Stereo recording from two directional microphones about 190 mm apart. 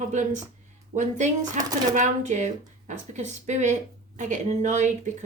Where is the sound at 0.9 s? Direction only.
40° right (ahead or behind).